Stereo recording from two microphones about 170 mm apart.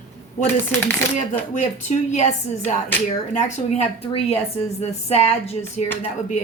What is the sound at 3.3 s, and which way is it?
A woman's voice, 45° left (ahead or behind).